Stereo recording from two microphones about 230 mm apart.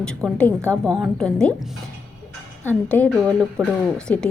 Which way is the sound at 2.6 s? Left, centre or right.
Centre.